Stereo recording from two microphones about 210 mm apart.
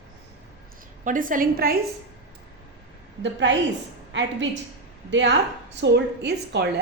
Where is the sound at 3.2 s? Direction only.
60° right (ahead or behind).